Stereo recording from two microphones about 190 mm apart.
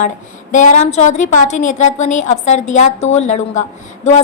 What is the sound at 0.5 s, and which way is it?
A woman's voice, 40° left (ahead or behind).